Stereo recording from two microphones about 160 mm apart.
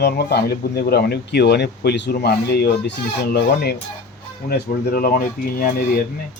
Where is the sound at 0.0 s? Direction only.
90° left; by 5.7 s 60° left (ahead or behind).